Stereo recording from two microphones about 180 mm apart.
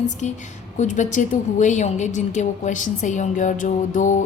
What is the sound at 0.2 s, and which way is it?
A woman's voice, 40° left (ahead or behind).